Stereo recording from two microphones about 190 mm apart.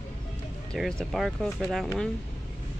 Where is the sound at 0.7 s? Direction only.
Centre (ahead or behind).